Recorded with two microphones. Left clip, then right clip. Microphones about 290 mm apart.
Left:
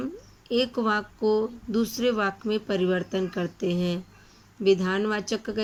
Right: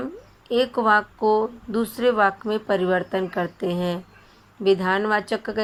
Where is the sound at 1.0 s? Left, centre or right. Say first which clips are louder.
Right 5 dB; right.